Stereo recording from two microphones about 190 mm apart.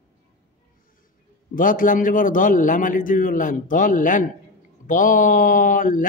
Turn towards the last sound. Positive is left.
turn(degrees=45)  # may be behind; listen again after turning